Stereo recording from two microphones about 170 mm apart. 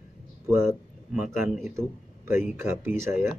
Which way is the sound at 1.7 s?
15° right (ahead or behind).